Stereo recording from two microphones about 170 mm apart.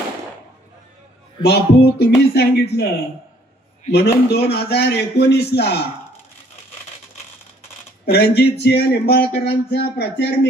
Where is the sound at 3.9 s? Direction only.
70° left (ahead or behind).